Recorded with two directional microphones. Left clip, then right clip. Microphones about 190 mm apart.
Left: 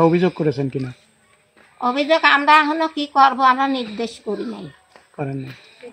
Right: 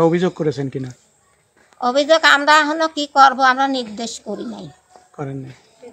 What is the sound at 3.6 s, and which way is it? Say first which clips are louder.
Speech: right 1 dB; 10° right (ahead or behind).